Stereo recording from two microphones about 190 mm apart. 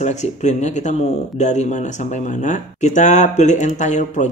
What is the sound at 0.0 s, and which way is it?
Speech, 40° left (ahead or behind).